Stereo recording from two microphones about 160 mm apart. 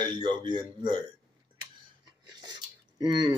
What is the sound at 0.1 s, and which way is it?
Speech, 30° right (ahead or behind).